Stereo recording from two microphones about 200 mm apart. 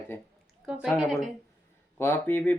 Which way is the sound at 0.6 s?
5° right (ahead or behind).